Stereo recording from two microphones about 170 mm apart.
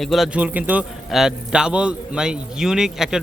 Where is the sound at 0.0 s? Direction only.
Centre (ahead or behind).